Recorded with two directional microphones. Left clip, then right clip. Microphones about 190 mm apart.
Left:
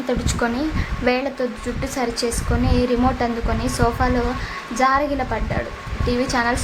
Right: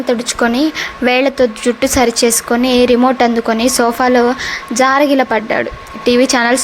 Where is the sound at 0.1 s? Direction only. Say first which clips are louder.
Right 8 dB; 30° right (ahead or behind).